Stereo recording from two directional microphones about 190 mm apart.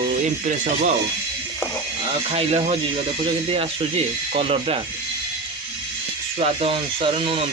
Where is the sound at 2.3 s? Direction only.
35° right (ahead or behind).